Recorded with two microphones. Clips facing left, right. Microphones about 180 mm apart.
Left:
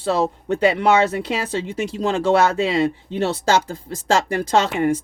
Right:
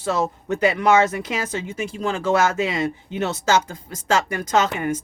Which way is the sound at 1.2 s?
35° left (ahead or behind).